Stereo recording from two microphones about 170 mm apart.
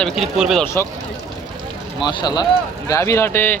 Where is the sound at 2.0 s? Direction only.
25° left (ahead or behind).